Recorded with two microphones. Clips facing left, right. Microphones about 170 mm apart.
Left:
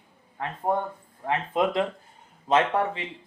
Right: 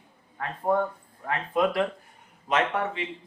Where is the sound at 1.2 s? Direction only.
20° left (ahead or behind).